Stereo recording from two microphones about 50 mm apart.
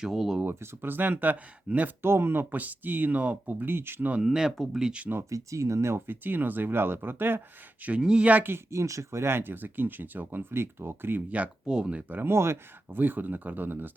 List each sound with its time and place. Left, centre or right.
0.0 s speech: centre
0.6 s speech: right
2.0 s speech: right
4.2 s speech: centre
4.5 s speech: centre
4.8 s speech: centre
5.3 s speech: right
6.1 s speech: right
8.2 s speech: right
8.7 s speech: right
9.2 s speech: right
11.3 s speech: right
12.1 s speech: right
12.9 s speech: right